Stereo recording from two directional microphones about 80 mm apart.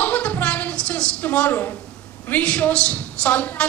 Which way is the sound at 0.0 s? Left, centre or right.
Centre.